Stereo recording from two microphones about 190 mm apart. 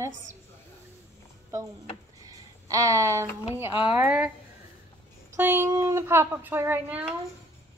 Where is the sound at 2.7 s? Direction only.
15° right (ahead or behind).